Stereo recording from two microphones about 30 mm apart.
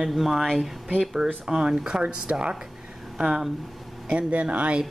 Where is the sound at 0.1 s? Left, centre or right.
Centre.